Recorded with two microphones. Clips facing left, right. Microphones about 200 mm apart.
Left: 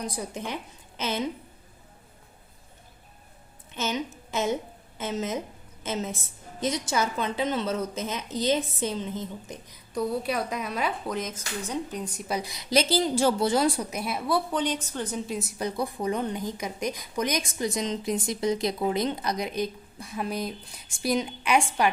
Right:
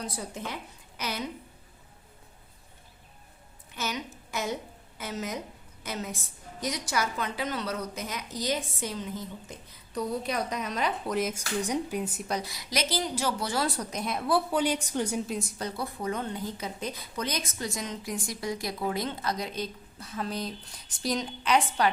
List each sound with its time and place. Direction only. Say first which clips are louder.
0.0 s a woman's voice: left 3 dB; 15° left (ahead or behind)
3.8 s a woman's voice: left 5 dB; 25° left (ahead or behind); by 12.2 s 5° right (ahead or behind)
12.3 s a woman's voice: left 9 dB; 15° left (ahead or behind); by 15.2 s 10° right (ahead or behind)
15.3 s a woman's voice: left 3 dB; 5° left (ahead or behind)